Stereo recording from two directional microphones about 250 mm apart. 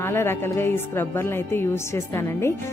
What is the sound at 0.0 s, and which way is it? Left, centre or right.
A woman's voice, centre.